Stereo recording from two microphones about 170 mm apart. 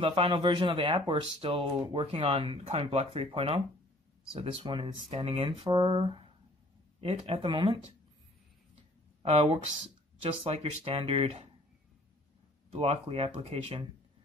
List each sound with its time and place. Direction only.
0.0 s speech: 30° right (ahead or behind)
9.2 s speech: 35° right (ahead or behind)
12.7 s speech: 35° right (ahead or behind)